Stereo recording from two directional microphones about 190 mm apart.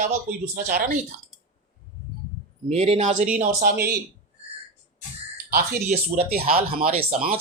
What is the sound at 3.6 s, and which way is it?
Speech, 50° right (ahead or behind).